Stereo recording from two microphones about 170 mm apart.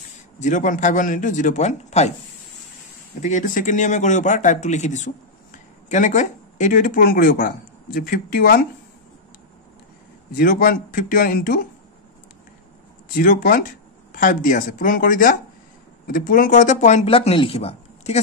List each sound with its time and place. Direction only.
0.4 s speech: 45° left (ahead or behind)
3.2 s speech: 45° left (ahead or behind)
10.3 s speech: 60° left (ahead or behind)
13.1 s speech: 55° left (ahead or behind); by 18.2 s 40° left (ahead or behind)